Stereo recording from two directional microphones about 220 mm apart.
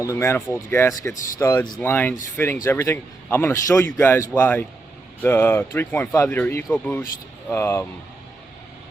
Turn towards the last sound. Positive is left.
turn(degrees=10)  # may be behind; listen again after turning